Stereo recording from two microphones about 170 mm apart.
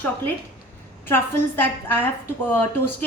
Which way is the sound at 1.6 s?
10° left (ahead or behind).